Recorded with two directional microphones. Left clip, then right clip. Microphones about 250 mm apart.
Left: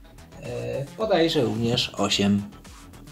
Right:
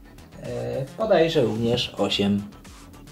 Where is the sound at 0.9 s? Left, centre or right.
Left.